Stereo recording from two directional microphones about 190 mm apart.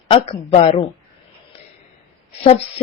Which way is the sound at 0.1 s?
30° left (ahead or behind).